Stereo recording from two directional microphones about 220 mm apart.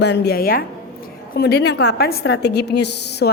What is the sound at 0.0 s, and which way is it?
A woman's voice, 50° left (ahead or behind).